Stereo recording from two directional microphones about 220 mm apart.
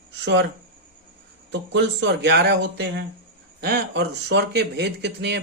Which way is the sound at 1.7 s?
50° right (ahead or behind).